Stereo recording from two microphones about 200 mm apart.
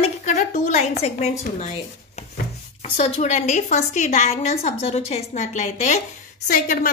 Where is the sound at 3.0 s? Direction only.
35° left (ahead or behind).